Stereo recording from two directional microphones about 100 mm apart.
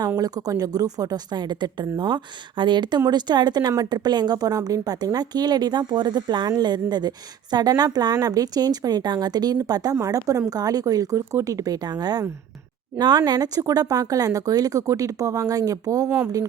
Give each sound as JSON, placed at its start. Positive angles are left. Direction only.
{"t": 0.2, "sound": "a woman's voice", "side_deg": -40}